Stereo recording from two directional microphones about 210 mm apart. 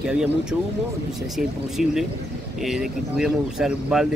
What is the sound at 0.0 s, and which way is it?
Speech, 5° right (ahead or behind).